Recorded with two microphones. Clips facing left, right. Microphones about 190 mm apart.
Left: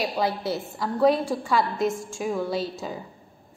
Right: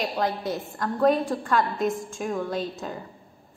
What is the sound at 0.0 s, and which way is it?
A woman's voice, 5° left (ahead or behind).